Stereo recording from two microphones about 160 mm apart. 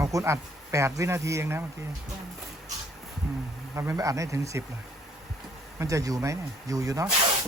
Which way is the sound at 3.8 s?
20° right (ahead or behind).